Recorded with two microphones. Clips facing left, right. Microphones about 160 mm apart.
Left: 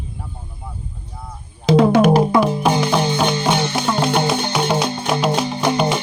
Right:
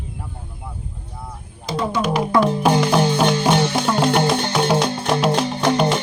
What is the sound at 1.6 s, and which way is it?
Speech, 85° left.